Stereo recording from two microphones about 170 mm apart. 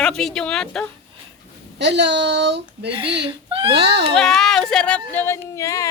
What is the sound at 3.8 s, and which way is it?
Speech, 80° right.